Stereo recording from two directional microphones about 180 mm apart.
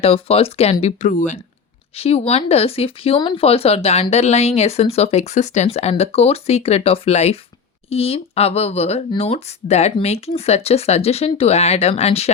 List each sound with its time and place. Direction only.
0.0 s speech: 35° left (ahead or behind)